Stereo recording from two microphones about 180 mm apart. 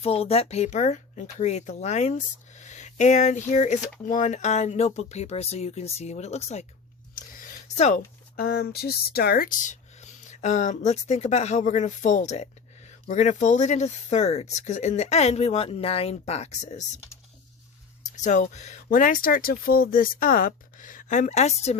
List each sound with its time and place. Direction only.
0.0 s speech: 35° left (ahead or behind)
7.2 s a sound: 50° left (ahead or behind)
8.4 s speech: 60° left (ahead or behind); by 16.8 s 40° left (ahead or behind)
18.2 s speech: 40° left (ahead or behind)